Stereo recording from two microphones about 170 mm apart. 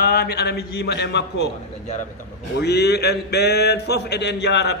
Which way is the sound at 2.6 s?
75° left (ahead or behind).